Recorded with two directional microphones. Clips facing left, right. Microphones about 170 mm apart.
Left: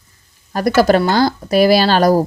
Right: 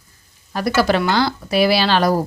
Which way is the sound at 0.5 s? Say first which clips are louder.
Left 5 dB; 45° left (ahead or behind).